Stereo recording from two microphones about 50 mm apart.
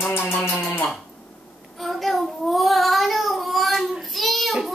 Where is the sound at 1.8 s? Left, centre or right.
Centre.